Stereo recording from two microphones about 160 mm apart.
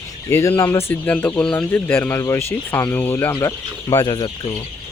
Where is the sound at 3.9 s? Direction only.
25° left (ahead or behind).